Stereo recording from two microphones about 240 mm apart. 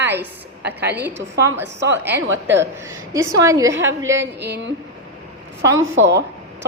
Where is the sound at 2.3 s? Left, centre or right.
Right.